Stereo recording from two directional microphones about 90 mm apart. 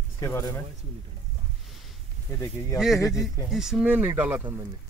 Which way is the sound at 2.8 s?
5° right (ahead or behind).